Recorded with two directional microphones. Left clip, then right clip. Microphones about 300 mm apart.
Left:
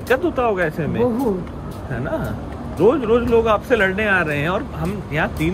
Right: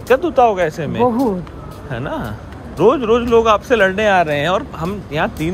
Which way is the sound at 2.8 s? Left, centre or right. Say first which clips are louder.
Right 3 dB; centre.